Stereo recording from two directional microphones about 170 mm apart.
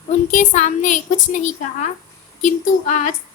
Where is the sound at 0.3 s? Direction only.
45° left (ahead or behind).